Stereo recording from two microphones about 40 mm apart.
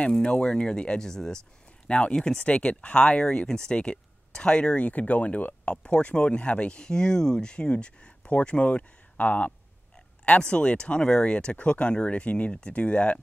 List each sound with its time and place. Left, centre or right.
0.2 s speech: left
1.9 s speech: left
4.8 s speech: left